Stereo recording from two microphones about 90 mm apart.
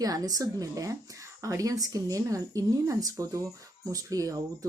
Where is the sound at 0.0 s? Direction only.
45° right (ahead or behind).